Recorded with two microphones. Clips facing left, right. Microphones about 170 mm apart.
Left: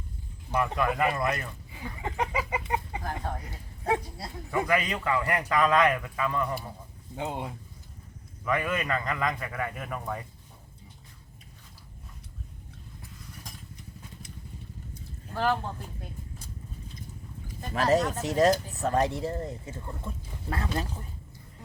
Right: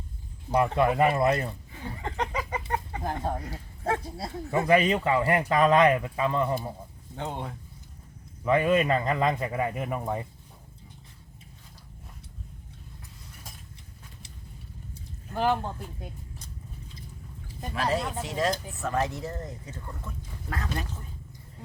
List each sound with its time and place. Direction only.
0.5 s speech: 30° right (ahead or behind)
1.7 s chicken: 5° left (ahead or behind)
3.0 s speech: 25° right (ahead or behind)
7.2 s speech: 5° left (ahead or behind)
8.4 s speech: 25° right (ahead or behind)
15.4 s speech: 15° right (ahead or behind)
17.7 s speech: 45° left (ahead or behind)
18.8 s speech: 30° left (ahead or behind)